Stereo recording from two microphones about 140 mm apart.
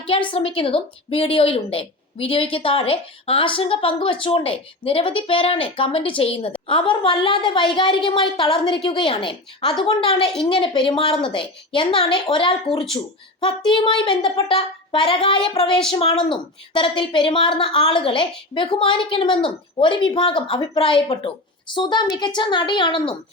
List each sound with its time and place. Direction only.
0.1 s a woman's voice: 40° left (ahead or behind)
13.7 s a woman's voice: 35° left (ahead or behind)